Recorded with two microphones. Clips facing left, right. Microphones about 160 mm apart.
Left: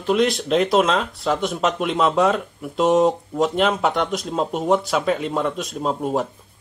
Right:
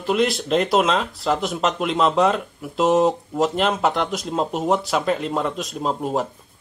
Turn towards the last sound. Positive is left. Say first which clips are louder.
# left 1 dB
turn(degrees=0)  # may be behind; listen again after turning